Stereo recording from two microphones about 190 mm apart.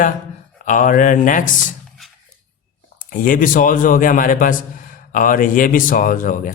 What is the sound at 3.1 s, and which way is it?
Speech, 45° left (ahead or behind).